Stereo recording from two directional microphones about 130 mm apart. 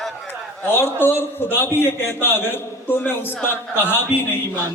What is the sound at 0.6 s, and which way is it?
A man's voice, 15° left (ahead or behind).